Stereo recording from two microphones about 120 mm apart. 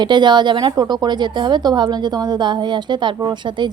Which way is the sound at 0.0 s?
40° right (ahead or behind).